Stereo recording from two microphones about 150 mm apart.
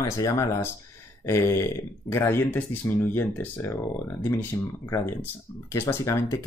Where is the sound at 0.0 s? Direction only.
20° left (ahead or behind).